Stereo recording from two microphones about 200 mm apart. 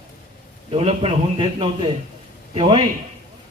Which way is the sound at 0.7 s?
30° right (ahead or behind).